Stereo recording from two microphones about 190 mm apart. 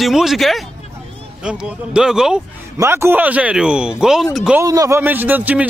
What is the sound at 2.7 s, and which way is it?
A man's voice, 15° right (ahead or behind).